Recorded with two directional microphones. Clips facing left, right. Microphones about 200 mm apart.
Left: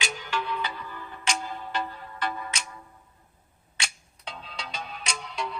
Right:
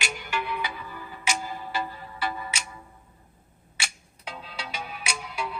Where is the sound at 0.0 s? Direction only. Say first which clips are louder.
Even; 10° right (ahead or behind).